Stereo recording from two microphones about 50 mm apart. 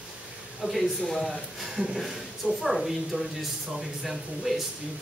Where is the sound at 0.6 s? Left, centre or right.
Centre.